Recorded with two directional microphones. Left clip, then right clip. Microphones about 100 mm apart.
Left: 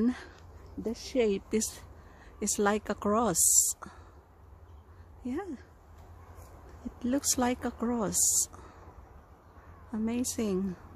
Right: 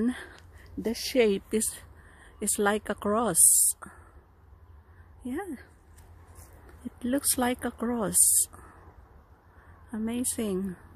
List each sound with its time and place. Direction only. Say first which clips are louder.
0.8 s speech: right 4 dB; 90° right
1.5 s speech: right 2 dB; 20° right (ahead or behind); by 4.0 s 5° right (ahead or behind)
5.2 s speech: right 1 dB; 10° right (ahead or behind)
7.0 s speech: right 1 dB; 15° right (ahead or behind)
9.8 s speech: even; 10° right (ahead or behind)